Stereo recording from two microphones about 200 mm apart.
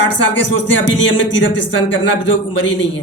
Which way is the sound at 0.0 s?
65° left (ahead or behind).